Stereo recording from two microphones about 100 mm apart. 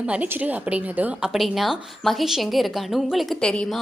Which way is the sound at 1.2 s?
5° right (ahead or behind).